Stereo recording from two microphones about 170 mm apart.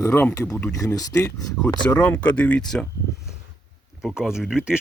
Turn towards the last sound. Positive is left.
turn(degrees=-5)  # may be behind; listen again after turning